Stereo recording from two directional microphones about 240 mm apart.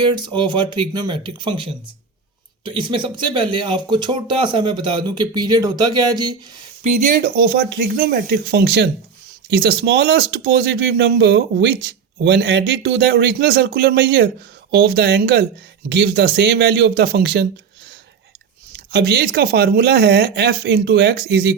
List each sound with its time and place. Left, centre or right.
0.0 s speech: centre
6.8 s speech: right
18.9 s speech: right